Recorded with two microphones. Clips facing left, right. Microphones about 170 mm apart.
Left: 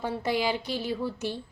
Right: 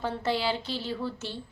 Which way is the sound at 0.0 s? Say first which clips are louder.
Left 1 dB; 15° left (ahead or behind).